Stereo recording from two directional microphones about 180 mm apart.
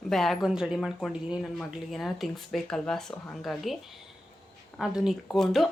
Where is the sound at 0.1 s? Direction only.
Centre (ahead or behind).